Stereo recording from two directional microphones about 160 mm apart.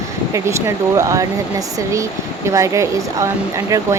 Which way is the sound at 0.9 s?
20° right (ahead or behind).